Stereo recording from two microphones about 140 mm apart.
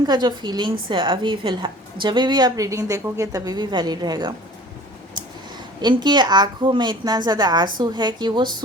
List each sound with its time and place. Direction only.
0.1 s a woman's voice: 30° right (ahead or behind)
5.8 s a woman's voice: 30° right (ahead or behind)